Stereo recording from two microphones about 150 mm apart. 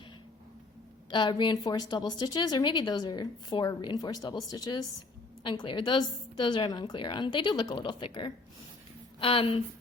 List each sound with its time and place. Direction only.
1.1 s a woman's voice: 30° left (ahead or behind)